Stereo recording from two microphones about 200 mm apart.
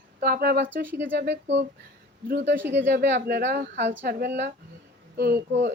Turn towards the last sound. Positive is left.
turn(degrees=-50)  # may be behind; listen again after turning